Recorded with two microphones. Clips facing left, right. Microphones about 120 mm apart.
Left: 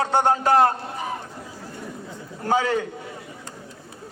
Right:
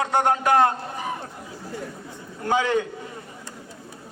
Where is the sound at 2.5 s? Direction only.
40° left (ahead or behind).